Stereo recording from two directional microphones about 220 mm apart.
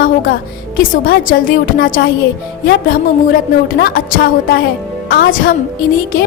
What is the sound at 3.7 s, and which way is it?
A woman's voice, 40° left (ahead or behind).